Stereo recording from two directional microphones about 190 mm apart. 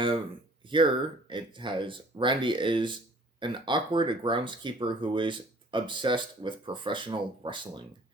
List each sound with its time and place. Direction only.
0.6 s speech: 25° right (ahead or behind)